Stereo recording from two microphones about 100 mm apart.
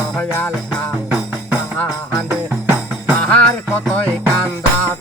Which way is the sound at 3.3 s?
15° left (ahead or behind).